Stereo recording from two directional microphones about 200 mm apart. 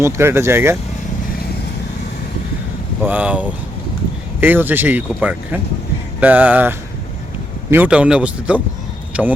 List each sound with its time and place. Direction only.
0.0 s speech: 15° right (ahead or behind)
3.0 s speech: 10° right (ahead or behind)